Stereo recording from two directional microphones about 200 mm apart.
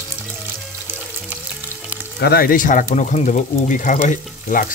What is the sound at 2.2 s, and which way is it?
Speech, 50° left (ahead or behind).